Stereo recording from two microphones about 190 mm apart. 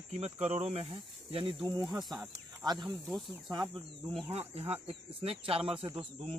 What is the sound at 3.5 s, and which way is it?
Speech, 25° right (ahead or behind).